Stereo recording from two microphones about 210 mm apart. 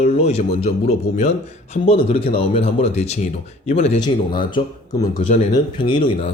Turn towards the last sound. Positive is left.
turn(degrees=25)  # may be behind; listen again after turning